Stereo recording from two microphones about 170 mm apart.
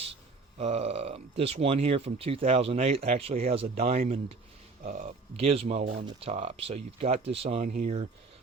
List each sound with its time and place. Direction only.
0.6 s speech: 40° right (ahead or behind)
5.8 s speech: 70° right (ahead or behind)
6.1 s speech: 35° right (ahead or behind)